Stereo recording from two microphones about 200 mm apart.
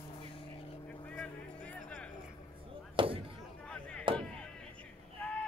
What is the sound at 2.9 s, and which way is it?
Speech, 25° right (ahead or behind).